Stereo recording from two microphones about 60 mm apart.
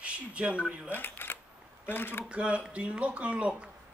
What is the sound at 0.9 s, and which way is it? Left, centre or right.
Speech, left.